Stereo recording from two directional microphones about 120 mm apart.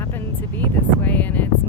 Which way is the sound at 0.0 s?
20° left (ahead or behind).